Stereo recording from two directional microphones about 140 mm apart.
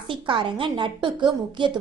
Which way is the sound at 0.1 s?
35° right (ahead or behind).